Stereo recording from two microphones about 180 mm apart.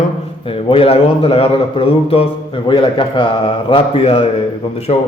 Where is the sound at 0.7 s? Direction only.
30° left (ahead or behind).